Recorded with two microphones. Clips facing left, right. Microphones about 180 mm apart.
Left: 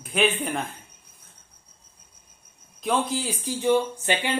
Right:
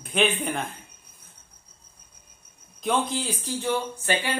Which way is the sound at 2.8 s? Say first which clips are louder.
Even; 5° left (ahead or behind).